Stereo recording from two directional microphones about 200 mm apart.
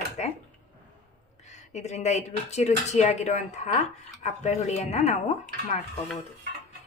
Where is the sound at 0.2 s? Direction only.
35° left (ahead or behind).